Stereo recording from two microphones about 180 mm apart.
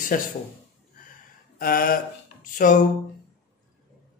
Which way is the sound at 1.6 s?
55° left (ahead or behind).